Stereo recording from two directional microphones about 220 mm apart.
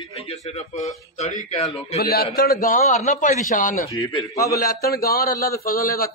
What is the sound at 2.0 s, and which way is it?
A man's voice, 45° left (ahead or behind).